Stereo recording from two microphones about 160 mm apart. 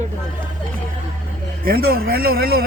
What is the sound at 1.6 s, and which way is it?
Speech, 70° right (ahead or behind).